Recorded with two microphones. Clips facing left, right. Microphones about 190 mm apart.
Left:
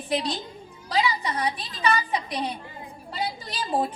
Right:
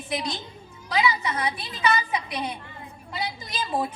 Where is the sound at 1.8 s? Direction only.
35° left (ahead or behind).